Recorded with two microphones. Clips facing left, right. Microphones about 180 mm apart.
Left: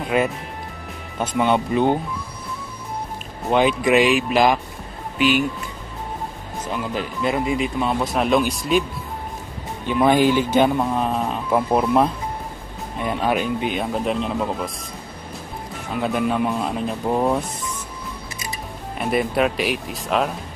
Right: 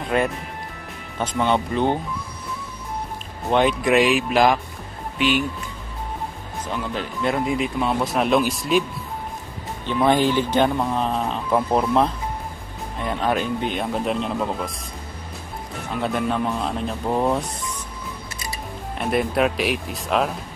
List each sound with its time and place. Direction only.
0.1 s speech: 10° left (ahead or behind)
3.4 s speech: centre (ahead or behind)
6.7 s speech: 5° left (ahead or behind)
9.8 s speech: 10° left (ahead or behind)
15.9 s speech: 5° left (ahead or behind)
18.9 s speech: centre (ahead or behind)